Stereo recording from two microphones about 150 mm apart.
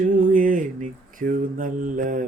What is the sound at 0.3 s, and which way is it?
Mantra, 60° right (ahead or behind).